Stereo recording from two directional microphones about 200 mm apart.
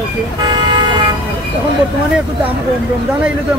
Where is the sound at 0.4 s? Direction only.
20° right (ahead or behind).